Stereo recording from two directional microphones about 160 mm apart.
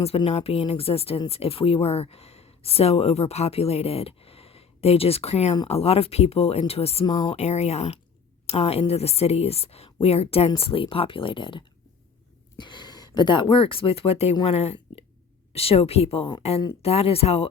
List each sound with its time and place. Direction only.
0.0 s speech: 40° left (ahead or behind)
7.0 s speech: 25° left (ahead or behind)
7.3 s speech: 45° left (ahead or behind)